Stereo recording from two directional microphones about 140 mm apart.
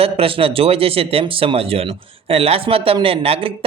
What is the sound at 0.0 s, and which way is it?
Speech, 40° right (ahead or behind).